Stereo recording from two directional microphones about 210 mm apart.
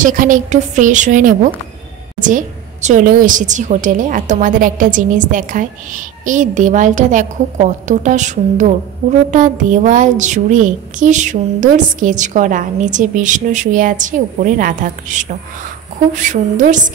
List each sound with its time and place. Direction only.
0.0 s a woman's voice: 40° right (ahead or behind)